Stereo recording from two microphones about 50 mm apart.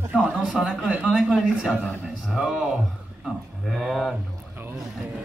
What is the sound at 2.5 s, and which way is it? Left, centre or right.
Speech, centre.